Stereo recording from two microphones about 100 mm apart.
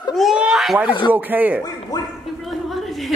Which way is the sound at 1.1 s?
15° right (ahead or behind).